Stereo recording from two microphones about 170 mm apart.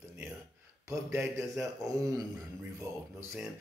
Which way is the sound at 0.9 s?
15° right (ahead or behind).